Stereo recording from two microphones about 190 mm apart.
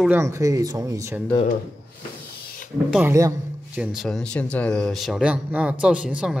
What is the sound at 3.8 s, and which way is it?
Speech, centre (ahead or behind).